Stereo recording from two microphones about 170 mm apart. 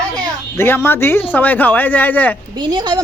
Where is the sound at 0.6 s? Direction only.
15° left (ahead or behind).